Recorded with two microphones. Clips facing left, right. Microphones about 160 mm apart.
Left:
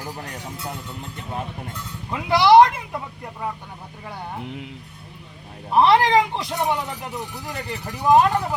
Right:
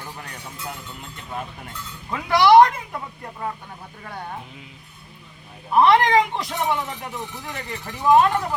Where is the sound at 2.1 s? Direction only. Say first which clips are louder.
Even; 25° left (ahead or behind).